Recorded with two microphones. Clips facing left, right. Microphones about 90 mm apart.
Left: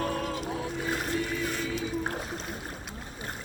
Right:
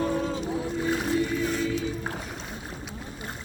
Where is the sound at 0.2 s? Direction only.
20° right (ahead or behind).